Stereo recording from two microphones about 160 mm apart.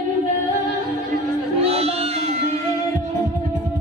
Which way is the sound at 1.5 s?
40° right (ahead or behind).